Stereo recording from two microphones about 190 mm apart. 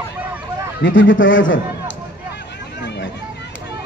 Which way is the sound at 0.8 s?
85° left.